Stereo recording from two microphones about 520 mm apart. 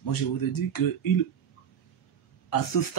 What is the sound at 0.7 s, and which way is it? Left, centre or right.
Speech, left.